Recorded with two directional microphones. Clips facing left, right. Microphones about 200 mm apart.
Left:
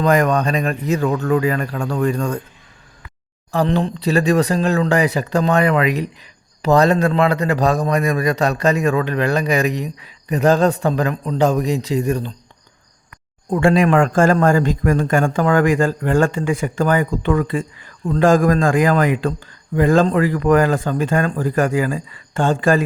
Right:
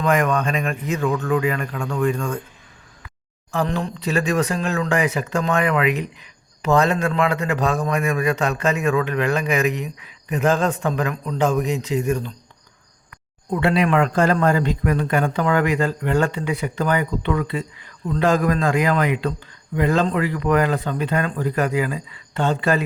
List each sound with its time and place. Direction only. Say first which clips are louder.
0.0 s speech: left 4 dB; 35° left (ahead or behind)
3.5 s speech: left 5 dB; 30° left (ahead or behind)
13.5 s a man's voice: left 4 dB; 45° left (ahead or behind)